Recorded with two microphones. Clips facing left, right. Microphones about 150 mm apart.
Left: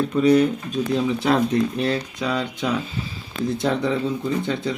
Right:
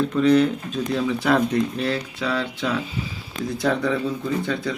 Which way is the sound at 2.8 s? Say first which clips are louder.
Right 1 dB; 15° right (ahead or behind).